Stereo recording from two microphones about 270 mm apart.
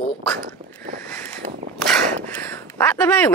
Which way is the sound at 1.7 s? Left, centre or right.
Centre.